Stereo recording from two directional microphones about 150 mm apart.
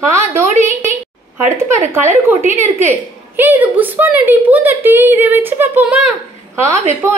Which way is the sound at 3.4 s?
10° right (ahead or behind).